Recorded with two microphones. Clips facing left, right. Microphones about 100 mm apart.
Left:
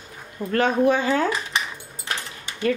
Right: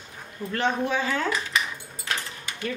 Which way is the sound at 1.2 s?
25° left (ahead or behind).